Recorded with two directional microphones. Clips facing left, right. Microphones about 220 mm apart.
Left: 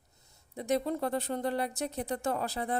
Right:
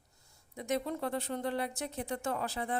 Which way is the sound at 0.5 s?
35° left (ahead or behind).